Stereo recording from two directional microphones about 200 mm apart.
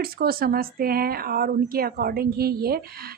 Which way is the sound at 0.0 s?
50° right (ahead or behind).